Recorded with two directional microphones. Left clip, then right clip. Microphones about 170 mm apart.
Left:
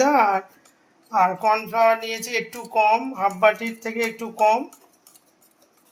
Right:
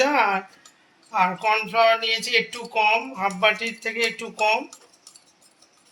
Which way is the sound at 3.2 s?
40° left (ahead or behind).